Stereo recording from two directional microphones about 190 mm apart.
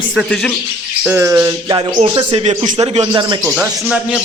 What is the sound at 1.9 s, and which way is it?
Speech, 30° right (ahead or behind).